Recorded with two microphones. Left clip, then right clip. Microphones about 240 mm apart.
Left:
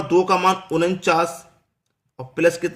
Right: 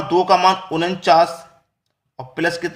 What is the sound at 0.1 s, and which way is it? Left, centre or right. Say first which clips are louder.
A man's voice: right 3 dB; left.